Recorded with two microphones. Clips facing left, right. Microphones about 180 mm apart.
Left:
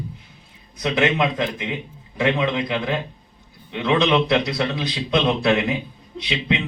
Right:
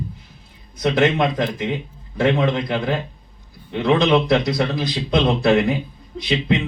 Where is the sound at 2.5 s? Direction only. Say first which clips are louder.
Right 1 dB; 5° left (ahead or behind).